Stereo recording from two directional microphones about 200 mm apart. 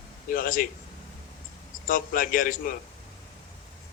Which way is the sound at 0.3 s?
45° left (ahead or behind).